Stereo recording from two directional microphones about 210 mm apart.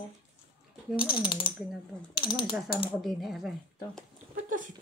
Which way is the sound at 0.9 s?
25° left (ahead or behind).